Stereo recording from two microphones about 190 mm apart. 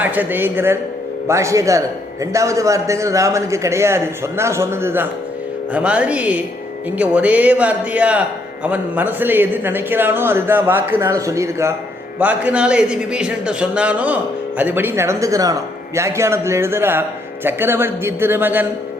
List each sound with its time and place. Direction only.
0.0 s a man's voice: 10° right (ahead or behind)